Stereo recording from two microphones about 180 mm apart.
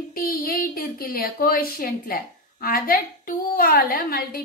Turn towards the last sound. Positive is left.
turn(degrees=55)  # may be behind; listen again after turning